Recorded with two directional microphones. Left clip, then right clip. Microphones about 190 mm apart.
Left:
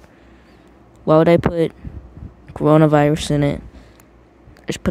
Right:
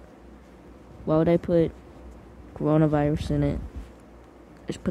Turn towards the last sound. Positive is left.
turn(degrees=40)  # may be behind; listen again after turning